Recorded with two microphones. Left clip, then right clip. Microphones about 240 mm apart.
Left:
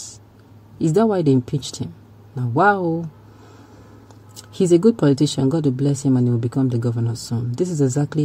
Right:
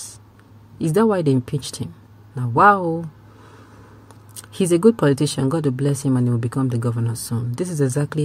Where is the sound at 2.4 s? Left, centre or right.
Right.